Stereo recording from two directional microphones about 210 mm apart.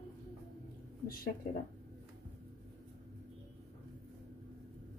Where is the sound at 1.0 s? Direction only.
45° left (ahead or behind).